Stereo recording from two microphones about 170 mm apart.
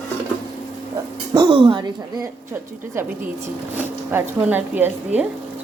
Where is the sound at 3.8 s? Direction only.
10° right (ahead or behind).